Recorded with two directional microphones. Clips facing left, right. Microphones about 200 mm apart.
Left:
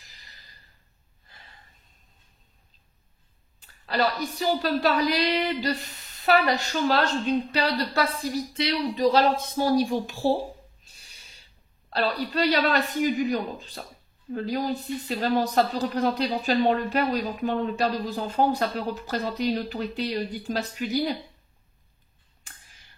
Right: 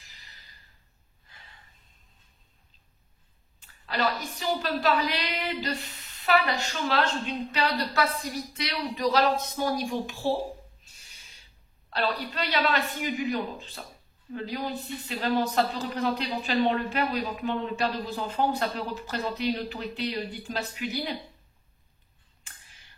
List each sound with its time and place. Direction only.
3.8 s speech: 40° left (ahead or behind)
11.9 s speech: 35° left (ahead or behind)